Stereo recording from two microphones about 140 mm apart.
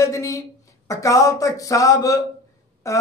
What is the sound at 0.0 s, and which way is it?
Speech, 20° left (ahead or behind).